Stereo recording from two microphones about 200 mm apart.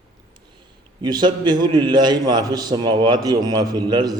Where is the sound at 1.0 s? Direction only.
20° right (ahead or behind).